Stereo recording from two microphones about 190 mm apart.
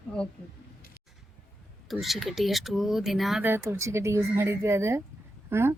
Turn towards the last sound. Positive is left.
turn(degrees=-10)  # may be behind; listen again after turning